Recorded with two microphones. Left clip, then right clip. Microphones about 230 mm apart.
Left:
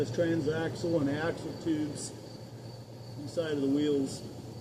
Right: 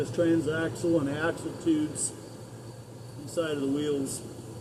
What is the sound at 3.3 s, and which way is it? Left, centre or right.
Speech, centre.